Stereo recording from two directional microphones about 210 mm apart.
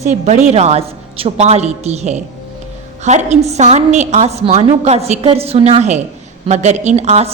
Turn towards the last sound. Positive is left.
turn(degrees=-30)  # may be behind; listen again after turning